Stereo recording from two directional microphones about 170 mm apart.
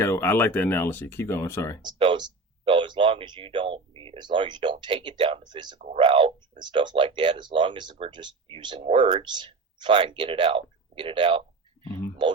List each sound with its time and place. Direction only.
0.0 s speech: 15° left (ahead or behind)
1.8 s speech: 30° right (ahead or behind)
5.8 s speech: 35° right (ahead or behind)